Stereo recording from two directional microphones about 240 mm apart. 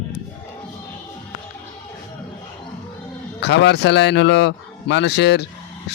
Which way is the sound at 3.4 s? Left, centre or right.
Left.